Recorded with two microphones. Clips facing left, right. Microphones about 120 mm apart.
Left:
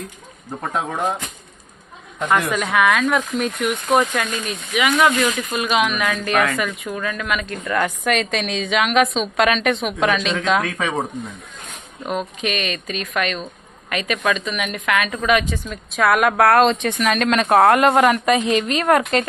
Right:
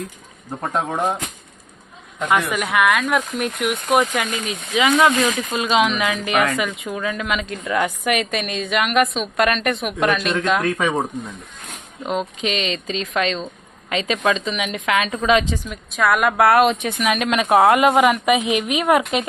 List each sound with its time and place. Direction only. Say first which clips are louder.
0.9 s speech: right 1 dB; 15° right (ahead or behind)
2.5 s a woman's voice: left 1 dB; 10° right (ahead or behind)
10.7 s speech: right 4 dB; 25° right (ahead or behind)
12.0 s speech: right 1 dB; 20° right (ahead or behind)
15.9 s a woman's voice: left 1 dB; centre (ahead or behind)